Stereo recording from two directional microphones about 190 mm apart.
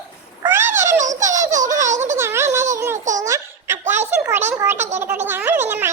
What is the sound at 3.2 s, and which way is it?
Baby laughter, 15° right (ahead or behind).